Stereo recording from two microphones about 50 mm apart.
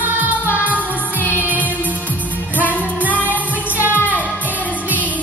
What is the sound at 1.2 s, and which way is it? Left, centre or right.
Music, left.